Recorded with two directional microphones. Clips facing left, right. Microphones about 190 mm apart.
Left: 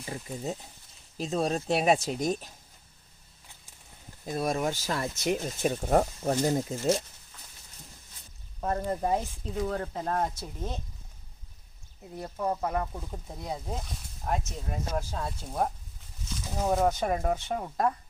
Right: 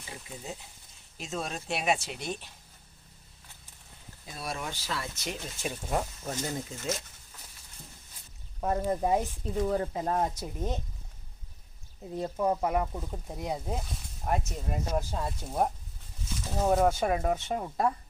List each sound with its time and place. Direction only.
1.2 s speech: 35° left (ahead or behind)
4.3 s speech: 45° left (ahead or behind)
6.4 s speech: 35° left (ahead or behind)
8.6 s speech: 10° right (ahead or behind)
12.1 s speech: 20° right (ahead or behind); by 17.9 s 5° right (ahead or behind)